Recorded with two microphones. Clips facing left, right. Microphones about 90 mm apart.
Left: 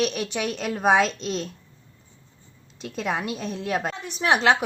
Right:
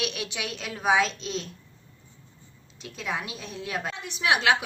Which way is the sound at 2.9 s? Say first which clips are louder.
Left 5 dB; 55° left (ahead or behind).